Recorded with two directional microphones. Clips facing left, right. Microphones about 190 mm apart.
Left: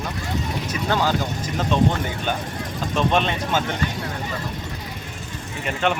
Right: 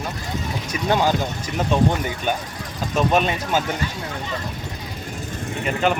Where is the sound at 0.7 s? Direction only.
15° right (ahead or behind).